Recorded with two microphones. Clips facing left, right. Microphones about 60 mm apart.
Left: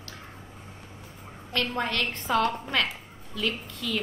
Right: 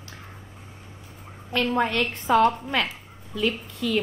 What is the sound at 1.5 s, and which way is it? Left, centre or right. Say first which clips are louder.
A woman's voice: right 5 dB; centre.